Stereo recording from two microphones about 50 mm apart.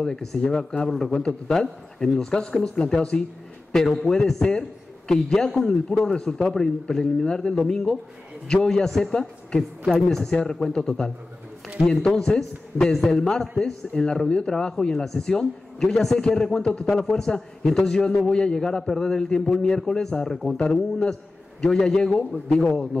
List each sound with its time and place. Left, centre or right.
0.0 s a man's voice: centre